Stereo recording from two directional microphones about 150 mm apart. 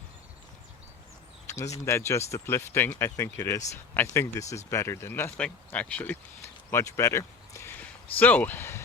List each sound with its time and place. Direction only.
1.5 s speech: 20° left (ahead or behind)